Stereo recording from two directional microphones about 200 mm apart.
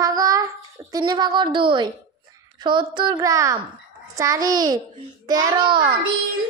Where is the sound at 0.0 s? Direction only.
15° right (ahead or behind).